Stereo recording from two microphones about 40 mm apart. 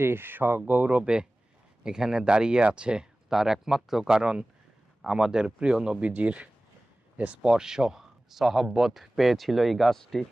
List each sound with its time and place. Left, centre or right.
0.0 s speech: right
0.7 s speech: right
1.0 s speech: right
3.2 s speech: centre
6.0 s speech: right; by 10.2 s centre